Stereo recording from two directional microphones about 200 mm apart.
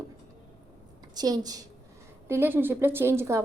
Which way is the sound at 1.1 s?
20° right (ahead or behind).